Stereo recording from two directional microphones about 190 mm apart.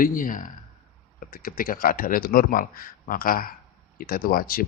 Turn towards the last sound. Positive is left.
turn(degrees=50)  # may be behind; listen again after turning